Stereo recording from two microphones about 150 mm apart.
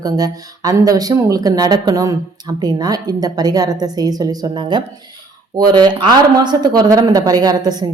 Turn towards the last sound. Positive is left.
turn(degrees=-25)  # may be behind; listen again after turning